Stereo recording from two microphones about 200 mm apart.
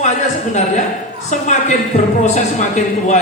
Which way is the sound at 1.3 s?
35° left (ahead or behind).